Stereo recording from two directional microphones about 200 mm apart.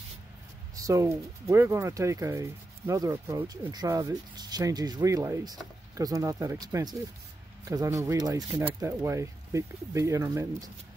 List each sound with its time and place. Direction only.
0.7 s speech: 15° right (ahead or behind)